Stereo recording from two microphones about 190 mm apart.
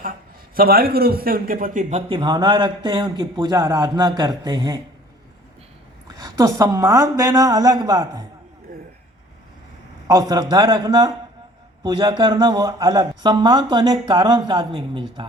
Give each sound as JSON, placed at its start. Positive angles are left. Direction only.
{"t": 0.5, "sound": "a man's voice", "side_deg": -50}
{"t": 6.1, "sound": "a man's voice", "side_deg": -20}
{"t": 10.1, "sound": "a man's voice", "side_deg": -20}